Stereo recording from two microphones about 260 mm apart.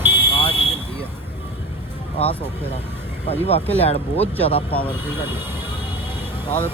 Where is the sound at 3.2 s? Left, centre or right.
Left.